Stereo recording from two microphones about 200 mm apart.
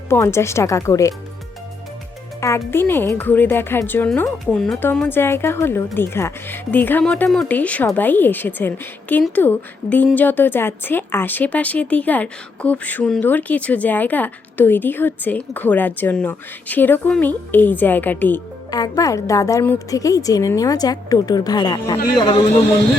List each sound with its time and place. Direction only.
0.1 s speech: 15° left (ahead or behind)
2.4 s a man's voice: 10° left (ahead or behind)